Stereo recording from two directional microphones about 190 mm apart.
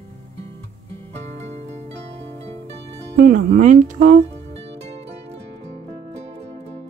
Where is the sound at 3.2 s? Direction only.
45° right (ahead or behind).